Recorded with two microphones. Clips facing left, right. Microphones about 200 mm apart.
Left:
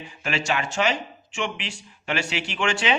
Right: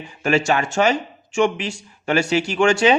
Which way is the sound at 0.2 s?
45° right (ahead or behind).